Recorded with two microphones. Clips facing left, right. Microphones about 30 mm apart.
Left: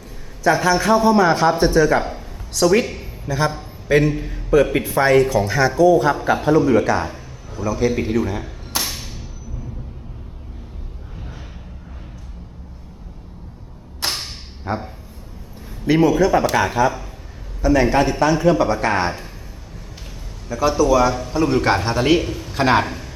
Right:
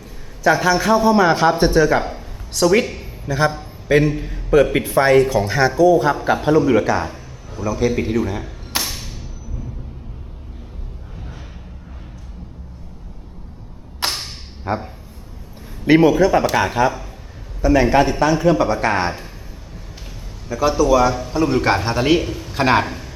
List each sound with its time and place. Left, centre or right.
0.4 s a man's voice: centre
8.8 s a sound: centre
14.1 s whip: centre
15.9 s a man's voice: right
16.1 s a man's voice: centre
20.5 s a man's voice: centre